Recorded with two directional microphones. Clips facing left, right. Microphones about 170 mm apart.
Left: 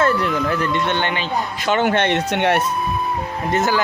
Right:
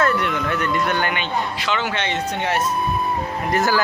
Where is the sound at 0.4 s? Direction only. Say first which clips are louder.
Left 2 dB; 30° left (ahead or behind).